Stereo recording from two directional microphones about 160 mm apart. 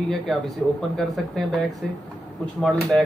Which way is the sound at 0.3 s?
Centre (ahead or behind).